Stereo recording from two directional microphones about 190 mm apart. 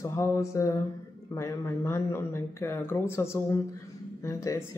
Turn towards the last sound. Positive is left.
turn(degrees=15)  # may be behind; listen again after turning